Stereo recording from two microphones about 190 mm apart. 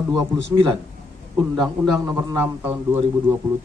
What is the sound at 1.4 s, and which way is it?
Speech, centre (ahead or behind).